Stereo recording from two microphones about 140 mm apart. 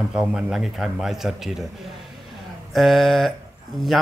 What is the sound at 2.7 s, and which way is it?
Speech, centre (ahead or behind).